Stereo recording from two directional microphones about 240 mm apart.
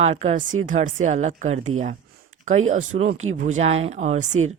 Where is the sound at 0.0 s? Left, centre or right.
Right.